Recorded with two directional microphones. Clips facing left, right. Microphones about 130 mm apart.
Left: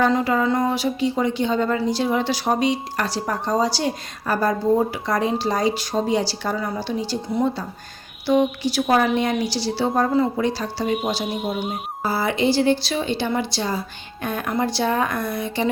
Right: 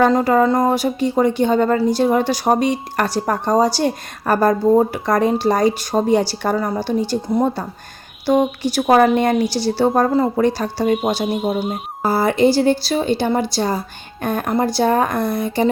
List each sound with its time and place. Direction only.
0.0 s a woman's voice: 45° right (ahead or behind)